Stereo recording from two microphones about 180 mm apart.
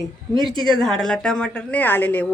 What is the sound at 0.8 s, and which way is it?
A woman's voice, centre (ahead or behind).